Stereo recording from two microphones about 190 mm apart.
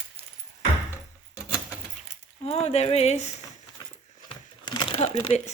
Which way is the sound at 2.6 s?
35° left (ahead or behind).